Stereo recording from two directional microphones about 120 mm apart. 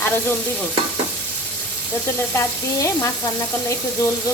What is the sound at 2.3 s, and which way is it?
Frying, 25° left (ahead or behind).